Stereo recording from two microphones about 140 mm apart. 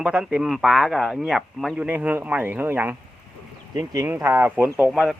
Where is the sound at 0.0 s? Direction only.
5° right (ahead or behind).